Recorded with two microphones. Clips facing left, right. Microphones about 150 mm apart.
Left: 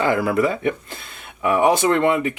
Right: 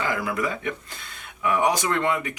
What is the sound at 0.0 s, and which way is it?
Speech, 30° left (ahead or behind).